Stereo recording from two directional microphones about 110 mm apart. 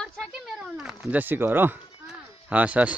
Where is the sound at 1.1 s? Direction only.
15° right (ahead or behind).